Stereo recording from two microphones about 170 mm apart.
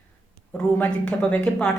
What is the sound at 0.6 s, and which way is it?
A woman's voice, 5° left (ahead or behind).